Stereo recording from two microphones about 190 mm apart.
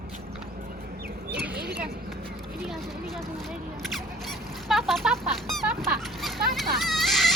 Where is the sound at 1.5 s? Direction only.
60° right (ahead or behind).